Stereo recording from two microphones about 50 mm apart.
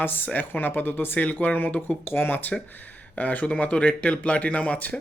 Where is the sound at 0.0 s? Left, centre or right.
Left.